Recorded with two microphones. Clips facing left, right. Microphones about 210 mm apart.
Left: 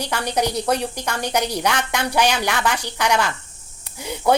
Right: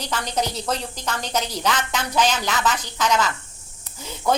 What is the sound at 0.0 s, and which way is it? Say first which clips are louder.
Speech: left 3 dB; 10° left (ahead or behind).